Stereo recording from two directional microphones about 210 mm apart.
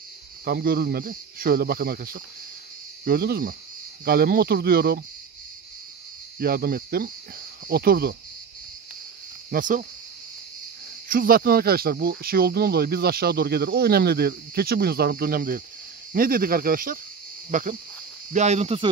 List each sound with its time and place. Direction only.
0.5 s speech: 45° right (ahead or behind)
6.4 s speech: 45° right (ahead or behind)
9.5 s speech: 40° right (ahead or behind)
11.1 s speech: 45° right (ahead or behind)